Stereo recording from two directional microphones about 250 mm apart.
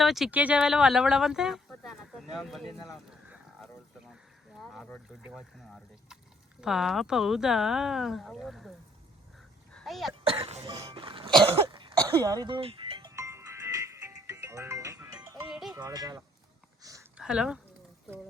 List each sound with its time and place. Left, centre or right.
0.0 s speech: centre
9.7 s throat clearing: centre
10.2 s cough: right
11.5 s music: centre
15.4 s music: centre
15.8 s speech: centre
16.8 s a sound: centre